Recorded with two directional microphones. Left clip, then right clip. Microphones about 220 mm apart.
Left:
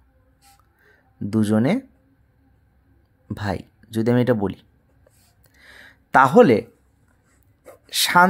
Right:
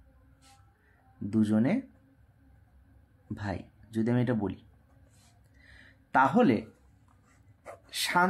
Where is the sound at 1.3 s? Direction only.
45° left (ahead or behind).